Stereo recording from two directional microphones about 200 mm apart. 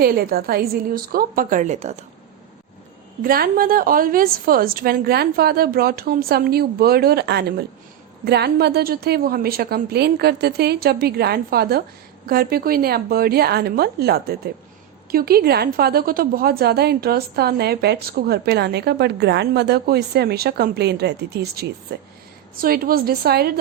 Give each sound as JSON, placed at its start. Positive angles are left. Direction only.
{"t": 0.0, "sound": "a woman's voice", "side_deg": -50}
{"t": 3.2, "sound": "a woman's voice", "side_deg": -45}